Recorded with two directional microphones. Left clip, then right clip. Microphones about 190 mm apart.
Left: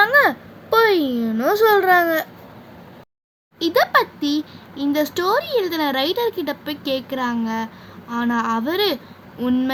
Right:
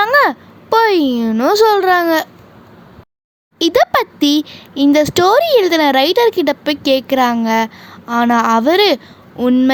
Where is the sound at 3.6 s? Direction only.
40° right (ahead or behind).